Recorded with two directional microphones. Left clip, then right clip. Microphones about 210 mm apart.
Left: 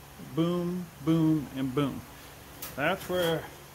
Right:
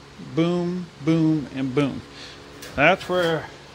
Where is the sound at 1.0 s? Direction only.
10° right (ahead or behind).